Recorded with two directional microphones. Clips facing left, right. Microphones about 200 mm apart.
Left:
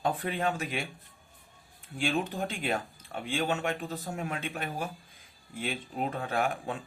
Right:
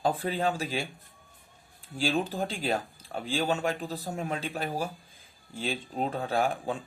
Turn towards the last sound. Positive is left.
turn(degrees=-30)  # may be behind; listen again after turning